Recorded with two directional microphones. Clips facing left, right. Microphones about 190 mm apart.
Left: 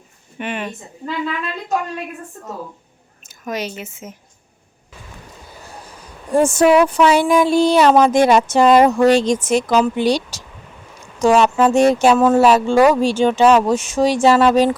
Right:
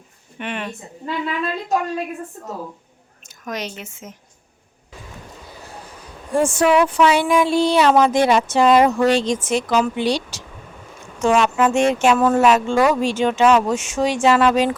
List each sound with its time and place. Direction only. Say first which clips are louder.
0.3 s a woman's voice: left 2 dB; 5° left (ahead or behind)
3.2 s speech: left 3 dB; 5° left (ahead or behind)
6.3 s speech: left 4 dB; 40° left (ahead or behind)